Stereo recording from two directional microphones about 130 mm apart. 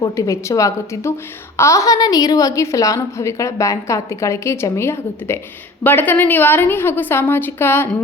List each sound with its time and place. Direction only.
0.0 s a woman's voice: 25° left (ahead or behind)